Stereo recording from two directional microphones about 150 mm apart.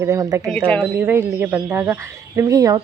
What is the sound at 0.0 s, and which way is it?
Speech, 20° right (ahead or behind).